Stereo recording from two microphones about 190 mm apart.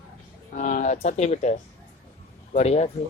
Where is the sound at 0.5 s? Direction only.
40° left (ahead or behind).